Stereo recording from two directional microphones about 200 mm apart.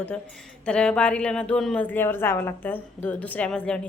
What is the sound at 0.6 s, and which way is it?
A woman's voice, 5° left (ahead or behind).